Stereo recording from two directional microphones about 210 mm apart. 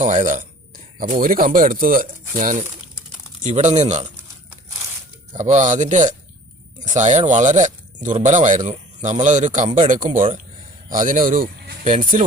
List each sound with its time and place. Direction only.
0.0 s speech: 40° right (ahead or behind)
5.4 s speech: 35° right (ahead or behind)